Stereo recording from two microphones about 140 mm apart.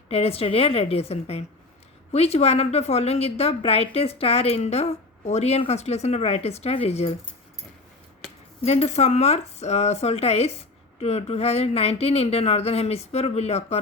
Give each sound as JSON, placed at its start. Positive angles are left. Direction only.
{"t": 0.1, "sound": "a woman's voice", "side_deg": 45}
{"t": 8.6, "sound": "a woman's voice", "side_deg": 50}